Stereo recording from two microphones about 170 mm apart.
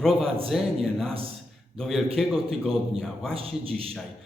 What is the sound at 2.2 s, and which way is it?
Speech, centre (ahead or behind).